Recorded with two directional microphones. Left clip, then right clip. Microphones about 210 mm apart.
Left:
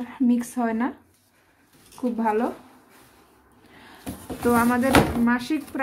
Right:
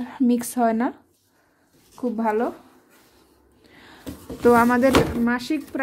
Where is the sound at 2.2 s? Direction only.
35° right (ahead or behind).